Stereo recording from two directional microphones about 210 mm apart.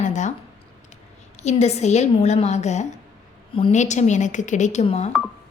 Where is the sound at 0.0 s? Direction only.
35° left (ahead or behind).